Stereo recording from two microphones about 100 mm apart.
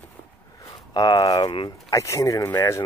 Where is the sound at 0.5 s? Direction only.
40° left (ahead or behind).